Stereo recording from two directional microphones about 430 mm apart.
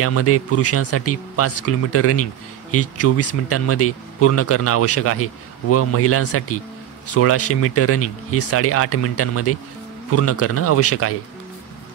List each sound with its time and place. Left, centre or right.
0.0 s speech: left